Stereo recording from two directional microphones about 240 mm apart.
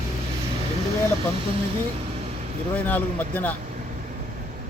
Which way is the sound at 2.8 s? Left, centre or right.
Centre.